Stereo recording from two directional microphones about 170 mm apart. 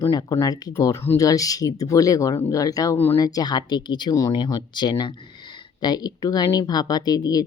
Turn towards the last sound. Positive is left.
turn(degrees=20)  # may be behind; listen again after turning